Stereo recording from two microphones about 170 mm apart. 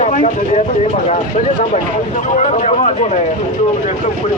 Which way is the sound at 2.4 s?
40° left (ahead or behind).